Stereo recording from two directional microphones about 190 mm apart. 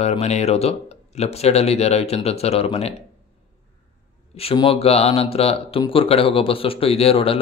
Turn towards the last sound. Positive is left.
turn(degrees=30)  # may be behind; listen again after turning